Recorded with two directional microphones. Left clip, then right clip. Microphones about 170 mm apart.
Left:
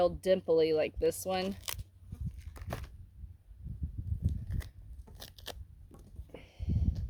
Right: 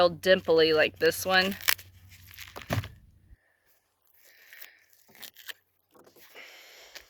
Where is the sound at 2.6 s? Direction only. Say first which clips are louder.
Right 10 dB; 20° right (ahead or behind).